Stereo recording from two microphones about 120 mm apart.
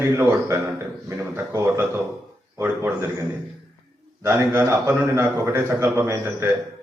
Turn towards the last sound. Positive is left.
turn(degrees=-20)  # may be behind; listen again after turning